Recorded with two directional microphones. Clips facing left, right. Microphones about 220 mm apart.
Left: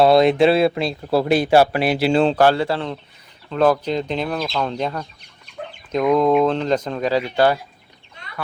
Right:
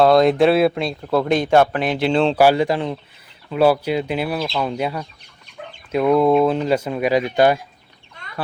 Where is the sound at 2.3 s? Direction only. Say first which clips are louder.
Right 2 dB; 10° right (ahead or behind).